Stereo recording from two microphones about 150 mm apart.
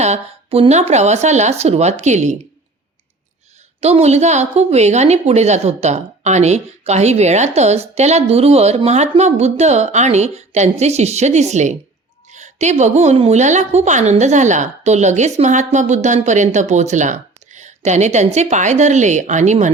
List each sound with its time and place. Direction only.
0.0 s a sound: 45° right (ahead or behind)
0.7 s a woman's voice: 50° right (ahead or behind)
3.8 s a woman's voice: 45° right (ahead or behind)